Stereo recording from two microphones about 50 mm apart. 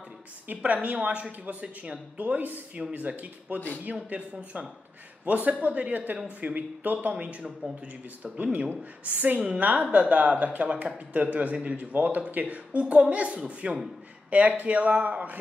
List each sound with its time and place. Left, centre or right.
0.5 s a woman's voice: right